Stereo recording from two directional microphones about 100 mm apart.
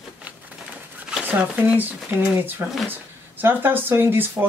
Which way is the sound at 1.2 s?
15° right (ahead or behind).